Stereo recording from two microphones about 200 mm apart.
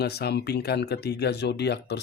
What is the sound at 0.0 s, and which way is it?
Speech, 55° left (ahead or behind).